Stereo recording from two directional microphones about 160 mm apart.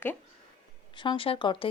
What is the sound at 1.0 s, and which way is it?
Speech, 30° left (ahead or behind).